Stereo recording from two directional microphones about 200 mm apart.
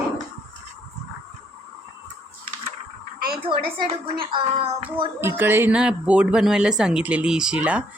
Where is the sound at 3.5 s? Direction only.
25° right (ahead or behind).